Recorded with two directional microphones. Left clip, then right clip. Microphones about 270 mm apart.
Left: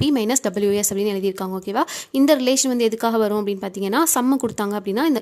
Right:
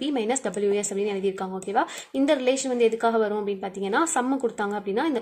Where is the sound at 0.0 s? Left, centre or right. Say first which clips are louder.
Left 5 dB; left.